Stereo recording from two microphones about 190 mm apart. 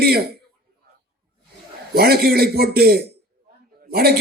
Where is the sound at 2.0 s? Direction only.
55° right (ahead or behind).